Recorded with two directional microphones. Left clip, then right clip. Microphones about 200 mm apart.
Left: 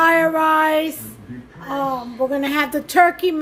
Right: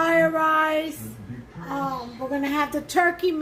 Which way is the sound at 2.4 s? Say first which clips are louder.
Left 4 dB; 55° left (ahead or behind).